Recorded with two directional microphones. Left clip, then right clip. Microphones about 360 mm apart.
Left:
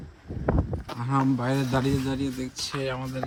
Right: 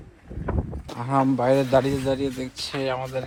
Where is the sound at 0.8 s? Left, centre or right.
Centre.